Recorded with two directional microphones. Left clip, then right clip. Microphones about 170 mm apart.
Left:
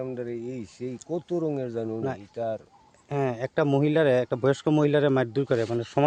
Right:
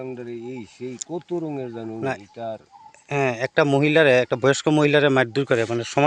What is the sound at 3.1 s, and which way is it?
Speech, 15° right (ahead or behind).